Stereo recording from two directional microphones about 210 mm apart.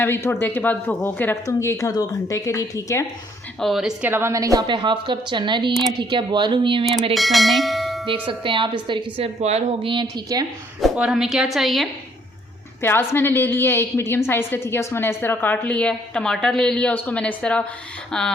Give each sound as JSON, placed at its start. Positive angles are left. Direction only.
{"t": 0.0, "sound": "a woman's voice", "side_deg": 10}
{"t": 3.6, "sound": "a woman's voice", "side_deg": 0}
{"t": 7.1, "sound": "bell", "side_deg": 0}
{"t": 8.0, "sound": "a woman's voice", "side_deg": -25}
{"t": 10.8, "sound": "a woman's voice", "side_deg": 0}
{"t": 12.8, "sound": "a woman's voice", "side_deg": 10}